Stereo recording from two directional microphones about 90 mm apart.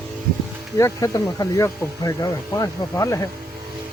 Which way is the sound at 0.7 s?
35° left (ahead or behind).